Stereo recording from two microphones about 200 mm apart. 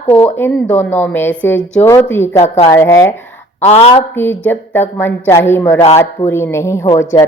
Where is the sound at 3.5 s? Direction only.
35° left (ahead or behind).